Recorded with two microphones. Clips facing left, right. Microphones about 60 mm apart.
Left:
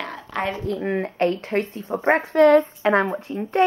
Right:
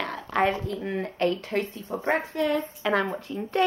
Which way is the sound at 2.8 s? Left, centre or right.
Left.